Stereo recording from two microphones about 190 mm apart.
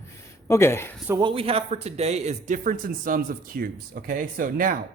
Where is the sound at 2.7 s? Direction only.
50° right (ahead or behind).